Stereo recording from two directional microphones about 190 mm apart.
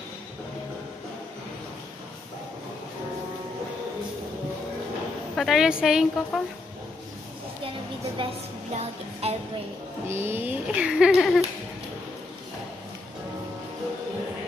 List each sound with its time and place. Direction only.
5.3 s a woman's voice: centre (ahead or behind)
8.2 s a sound: 25° right (ahead or behind)
8.7 s music: 30° right (ahead or behind)
10.0 s a woman's voice: 10° right (ahead or behind)